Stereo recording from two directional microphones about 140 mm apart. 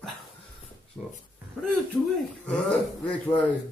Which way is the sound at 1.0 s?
Centre (ahead or behind).